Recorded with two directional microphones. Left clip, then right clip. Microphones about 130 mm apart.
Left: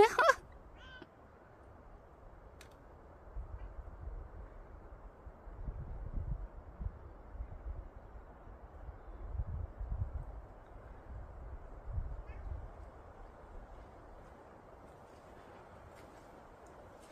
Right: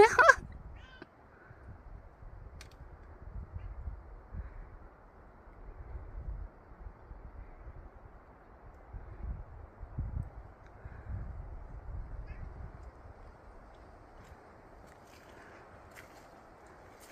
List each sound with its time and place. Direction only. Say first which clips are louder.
0.0 s cat: right 5 dB; 25° right (ahead or behind)